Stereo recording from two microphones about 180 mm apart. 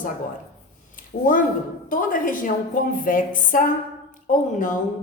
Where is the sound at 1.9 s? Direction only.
50° left (ahead or behind).